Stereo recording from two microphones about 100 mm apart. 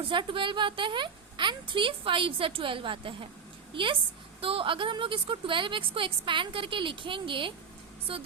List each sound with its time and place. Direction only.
0.0 s a woman's voice: 55° right (ahead or behind)